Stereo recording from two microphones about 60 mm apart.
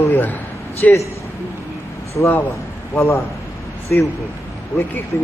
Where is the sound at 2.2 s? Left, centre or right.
Left.